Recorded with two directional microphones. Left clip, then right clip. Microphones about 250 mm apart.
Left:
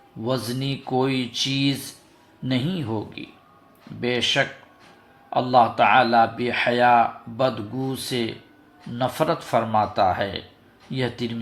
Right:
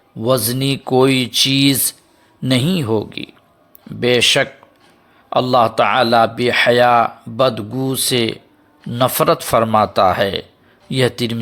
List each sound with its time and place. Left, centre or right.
0.2 s speech: right